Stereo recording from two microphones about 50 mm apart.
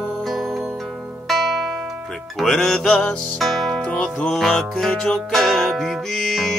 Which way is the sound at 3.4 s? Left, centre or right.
Centre.